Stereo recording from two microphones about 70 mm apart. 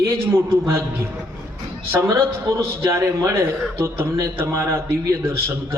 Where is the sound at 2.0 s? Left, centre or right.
Right.